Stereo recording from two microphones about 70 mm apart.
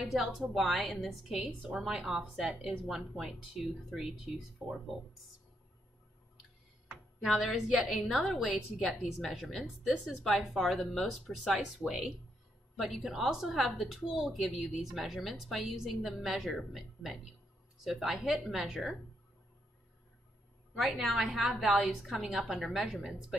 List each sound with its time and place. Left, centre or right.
0.0 s a woman's voice: centre
7.3 s a woman's voice: centre
12.7 s a woman's voice: centre
20.8 s a woman's voice: centre